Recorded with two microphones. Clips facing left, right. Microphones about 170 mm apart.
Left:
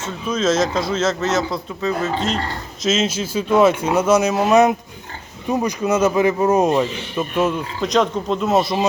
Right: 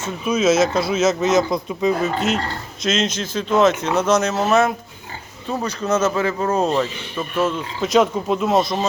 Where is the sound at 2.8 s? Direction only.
5° left (ahead or behind).